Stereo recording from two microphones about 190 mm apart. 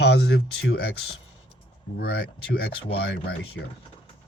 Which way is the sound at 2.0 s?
55° left (ahead or behind).